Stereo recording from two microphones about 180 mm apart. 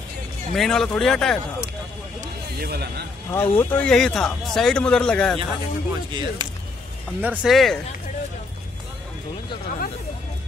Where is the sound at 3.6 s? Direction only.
5° left (ahead or behind).